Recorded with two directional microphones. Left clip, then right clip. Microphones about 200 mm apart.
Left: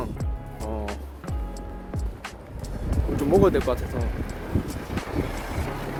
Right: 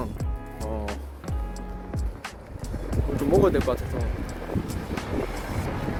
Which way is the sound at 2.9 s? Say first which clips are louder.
Left 1 dB; centre (ahead or behind).